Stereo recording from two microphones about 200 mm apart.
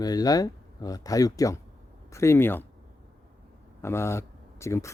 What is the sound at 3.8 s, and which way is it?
Speech, 10° left (ahead or behind).